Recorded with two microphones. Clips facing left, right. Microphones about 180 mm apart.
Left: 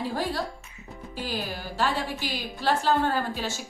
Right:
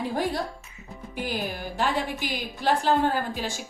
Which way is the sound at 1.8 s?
15° right (ahead or behind).